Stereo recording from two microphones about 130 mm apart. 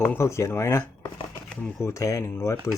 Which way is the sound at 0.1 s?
20° left (ahead or behind).